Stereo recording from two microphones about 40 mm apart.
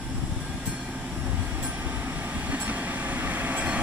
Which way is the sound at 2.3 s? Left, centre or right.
Right.